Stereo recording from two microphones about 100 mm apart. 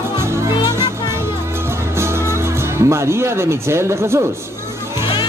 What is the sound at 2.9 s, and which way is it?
Speech, 25° right (ahead or behind).